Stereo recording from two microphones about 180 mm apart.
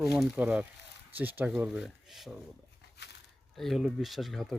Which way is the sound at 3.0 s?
70° left (ahead or behind).